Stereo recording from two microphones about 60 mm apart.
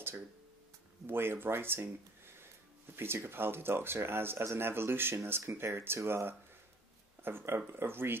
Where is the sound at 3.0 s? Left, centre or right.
Right.